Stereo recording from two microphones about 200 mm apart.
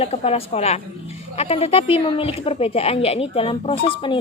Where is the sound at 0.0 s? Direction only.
30° left (ahead or behind).